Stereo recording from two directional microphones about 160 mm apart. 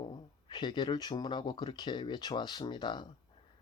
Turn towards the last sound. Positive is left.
turn(degrees=30)  # may be behind; listen again after turning